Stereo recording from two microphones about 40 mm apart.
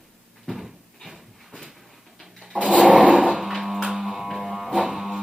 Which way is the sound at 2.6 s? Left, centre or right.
Right.